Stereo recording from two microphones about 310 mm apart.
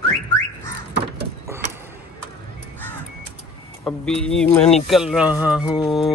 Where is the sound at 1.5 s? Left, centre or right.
Centre.